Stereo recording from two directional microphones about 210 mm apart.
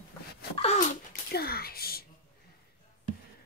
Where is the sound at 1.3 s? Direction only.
45° left (ahead or behind).